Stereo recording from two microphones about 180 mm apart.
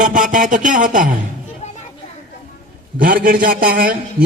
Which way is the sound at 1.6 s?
40° left (ahead or behind).